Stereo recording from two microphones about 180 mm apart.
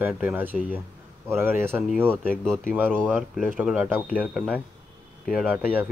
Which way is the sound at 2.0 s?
5° left (ahead or behind).